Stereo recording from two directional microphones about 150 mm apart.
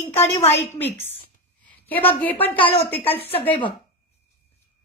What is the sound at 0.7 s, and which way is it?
A woman's voice, 15° left (ahead or behind).